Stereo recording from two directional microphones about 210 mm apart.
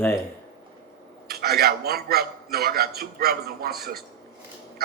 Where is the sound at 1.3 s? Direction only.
45° right (ahead or behind).